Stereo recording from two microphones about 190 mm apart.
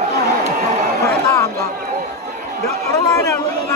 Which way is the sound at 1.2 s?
15° left (ahead or behind).